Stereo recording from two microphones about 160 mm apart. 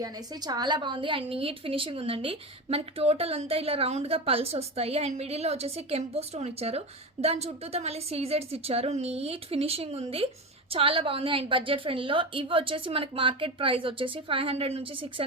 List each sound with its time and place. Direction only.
0.0 s a woman's voice: 25° right (ahead or behind)